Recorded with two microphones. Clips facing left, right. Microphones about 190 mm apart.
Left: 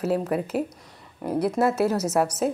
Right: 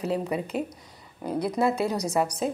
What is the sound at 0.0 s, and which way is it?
Speech, 5° left (ahead or behind).